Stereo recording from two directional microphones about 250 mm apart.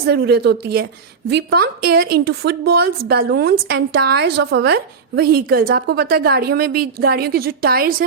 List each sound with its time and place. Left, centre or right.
0.0 s a woman's voice: right